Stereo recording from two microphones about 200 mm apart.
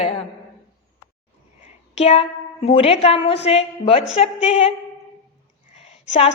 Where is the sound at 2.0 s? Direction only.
30° left (ahead or behind).